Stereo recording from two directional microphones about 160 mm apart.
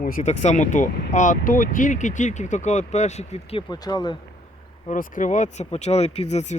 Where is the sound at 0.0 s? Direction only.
55° left (ahead or behind).